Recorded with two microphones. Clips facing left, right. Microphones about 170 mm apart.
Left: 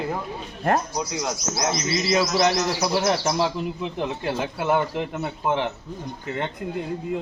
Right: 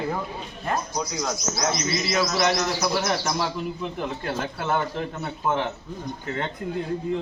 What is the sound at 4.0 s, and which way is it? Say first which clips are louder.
Speech: left 4 dB; 15° left (ahead or behind).